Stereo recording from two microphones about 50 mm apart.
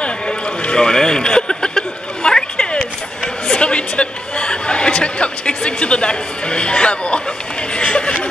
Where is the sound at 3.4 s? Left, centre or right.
Left.